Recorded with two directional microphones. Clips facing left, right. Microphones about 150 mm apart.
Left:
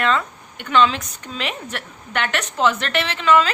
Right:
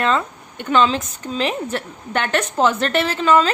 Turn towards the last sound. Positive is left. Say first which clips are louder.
# right 2 dB
turn(degrees=-40)  # may be behind; listen again after turning